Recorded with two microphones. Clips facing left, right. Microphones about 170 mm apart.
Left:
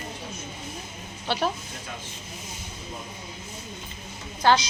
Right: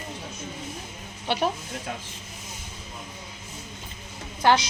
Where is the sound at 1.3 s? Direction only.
20° right (ahead or behind).